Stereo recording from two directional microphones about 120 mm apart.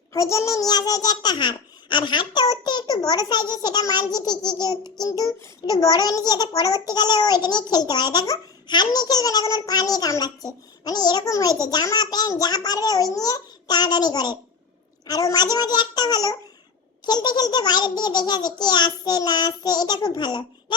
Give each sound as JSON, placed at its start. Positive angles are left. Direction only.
{"t": 0.1, "sound": "a child's voice", "side_deg": 25}